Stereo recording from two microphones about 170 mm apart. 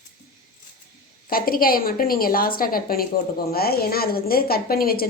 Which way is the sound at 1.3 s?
60° left (ahead or behind).